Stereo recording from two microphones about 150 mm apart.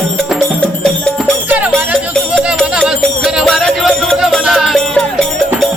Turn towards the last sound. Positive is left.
turn(degrees=5)  # may be behind; listen again after turning